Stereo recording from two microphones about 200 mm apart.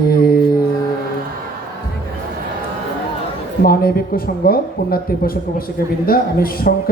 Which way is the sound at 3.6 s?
50° left (ahead or behind).